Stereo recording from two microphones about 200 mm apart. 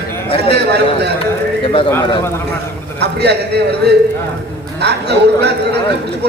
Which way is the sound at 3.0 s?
55° right (ahead or behind).